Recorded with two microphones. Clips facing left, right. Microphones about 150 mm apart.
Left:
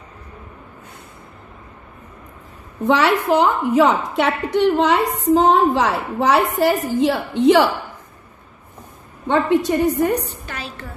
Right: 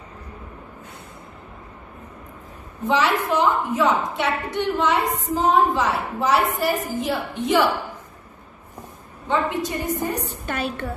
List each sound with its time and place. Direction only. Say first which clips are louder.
2.9 s a woman's voice: left 5 dB; 65° left (ahead or behind)
9.3 s a woman's voice: left 6 dB; 65° left (ahead or behind)
10.2 s a woman's voice: right 5 dB; 50° right (ahead or behind)